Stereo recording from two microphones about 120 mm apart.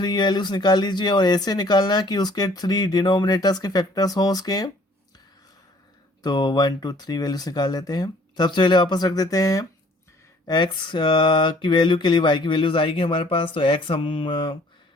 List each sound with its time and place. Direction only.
0.0 s speech: 35° left (ahead or behind)
6.2 s speech: 35° left (ahead or behind)
10.4 s a sound: 40° left (ahead or behind)